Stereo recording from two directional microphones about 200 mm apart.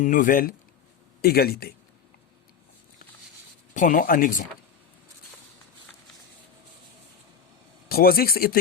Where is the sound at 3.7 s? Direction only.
40° left (ahead or behind).